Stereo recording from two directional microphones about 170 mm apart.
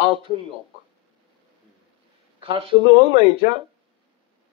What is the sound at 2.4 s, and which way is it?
A man's voice, 30° right (ahead or behind).